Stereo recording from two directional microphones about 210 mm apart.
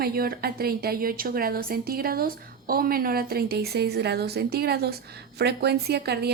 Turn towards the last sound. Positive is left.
turn(degrees=-50)  # may be behind; listen again after turning